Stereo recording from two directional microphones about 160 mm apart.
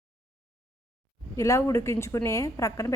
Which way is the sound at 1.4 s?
20° left (ahead or behind).